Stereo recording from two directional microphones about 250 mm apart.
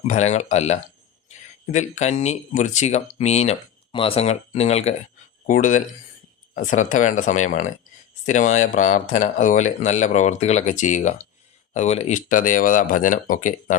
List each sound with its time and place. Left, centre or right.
0.1 s speech: left